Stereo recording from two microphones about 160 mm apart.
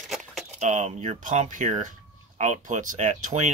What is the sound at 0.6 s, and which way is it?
Speech, 50° right (ahead or behind).